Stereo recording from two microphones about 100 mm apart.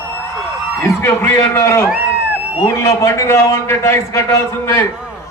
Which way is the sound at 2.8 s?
35° left (ahead or behind).